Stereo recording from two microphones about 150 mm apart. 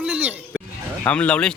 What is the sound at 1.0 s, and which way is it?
Speech, 10° left (ahead or behind).